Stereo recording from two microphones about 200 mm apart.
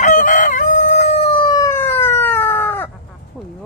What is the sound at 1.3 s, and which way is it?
Chicken, 20° left (ahead or behind).